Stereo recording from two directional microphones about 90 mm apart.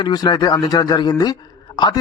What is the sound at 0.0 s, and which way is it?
A man's voice, 50° left (ahead or behind).